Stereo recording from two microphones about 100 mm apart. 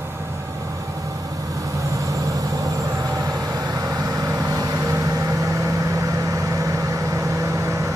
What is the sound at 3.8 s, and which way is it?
Vehicle, 35° right (ahead or behind).